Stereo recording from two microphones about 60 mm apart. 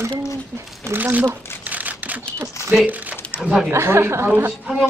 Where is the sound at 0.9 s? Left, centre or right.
Right.